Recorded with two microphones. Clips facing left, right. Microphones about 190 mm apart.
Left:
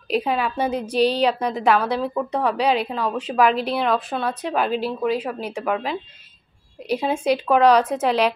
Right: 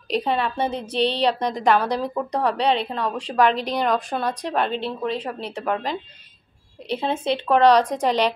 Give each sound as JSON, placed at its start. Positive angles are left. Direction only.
{"t": 0.1, "sound": "a woman's voice", "side_deg": 5}
{"t": 7.0, "sound": "speech", "side_deg": 10}